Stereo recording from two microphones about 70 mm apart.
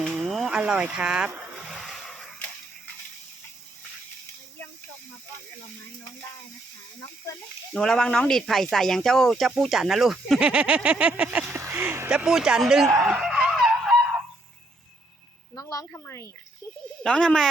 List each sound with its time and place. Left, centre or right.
0.0 s a sound: centre
0.3 s a sound: centre
0.6 s speech: centre
1.6 s a sound: centre
7.7 s speech: centre
10.4 s speech: centre
11.5 s speech: right
12.0 s speech: centre
13.1 s a sound: centre
13.5 s fowl: centre
15.5 s a woman's voice: left
15.9 s a woman's voice: left
17.0 s speech: centre